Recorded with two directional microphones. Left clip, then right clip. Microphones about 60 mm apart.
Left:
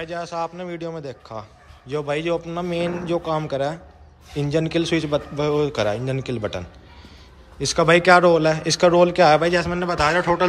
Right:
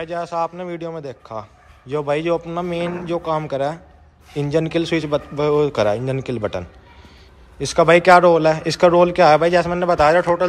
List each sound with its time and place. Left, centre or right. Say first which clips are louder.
0.0 s a man's voice: right 4 dB; left
5.7 s a man's voice: right 4 dB; centre
7.5 s a man's voice: right 3 dB; left
9.9 s a man's voice: right 5 dB; centre